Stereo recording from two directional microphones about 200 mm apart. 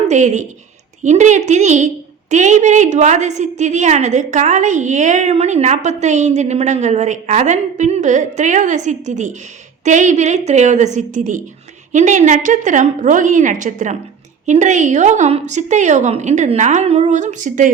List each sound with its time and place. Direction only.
0.1 s a woman's voice: 35° right (ahead or behind)